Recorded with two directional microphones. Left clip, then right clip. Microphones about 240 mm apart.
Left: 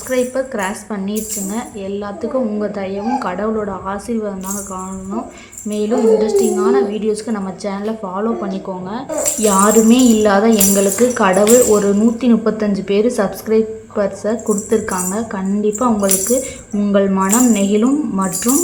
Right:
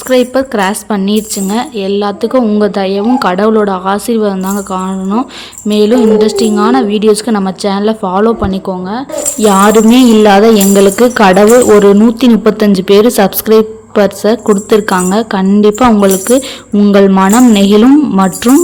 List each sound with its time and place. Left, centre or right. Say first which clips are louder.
0.1 s a woman's voice: right 8 dB; right